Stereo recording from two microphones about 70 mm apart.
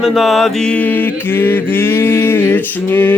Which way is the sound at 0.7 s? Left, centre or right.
Left.